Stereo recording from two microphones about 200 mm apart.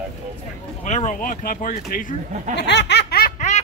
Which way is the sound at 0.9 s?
35° left (ahead or behind).